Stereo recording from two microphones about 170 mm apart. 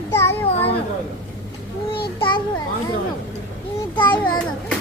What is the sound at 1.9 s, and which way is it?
Child singing, 30° left (ahead or behind).